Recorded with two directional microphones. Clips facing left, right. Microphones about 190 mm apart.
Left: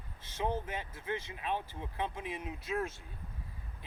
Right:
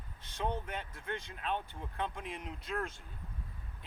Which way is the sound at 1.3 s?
15° left (ahead or behind).